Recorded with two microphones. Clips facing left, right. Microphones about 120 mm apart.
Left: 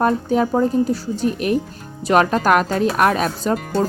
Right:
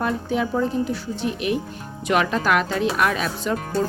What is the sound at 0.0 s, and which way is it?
A woman's voice, 40° left (ahead or behind).